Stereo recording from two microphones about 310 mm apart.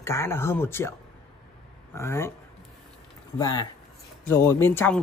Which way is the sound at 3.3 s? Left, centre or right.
Centre.